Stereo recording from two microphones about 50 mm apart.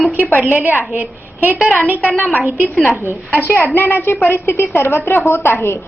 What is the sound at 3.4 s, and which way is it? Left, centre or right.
A woman's voice, left.